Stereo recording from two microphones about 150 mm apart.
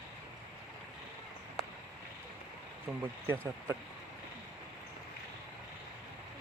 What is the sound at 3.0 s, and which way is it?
Speech, 15° right (ahead or behind).